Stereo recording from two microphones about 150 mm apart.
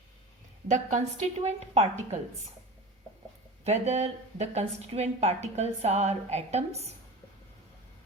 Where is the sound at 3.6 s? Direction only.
45° right (ahead or behind).